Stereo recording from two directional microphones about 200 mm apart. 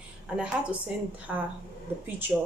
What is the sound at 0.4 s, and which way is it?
Speech, 5° right (ahead or behind).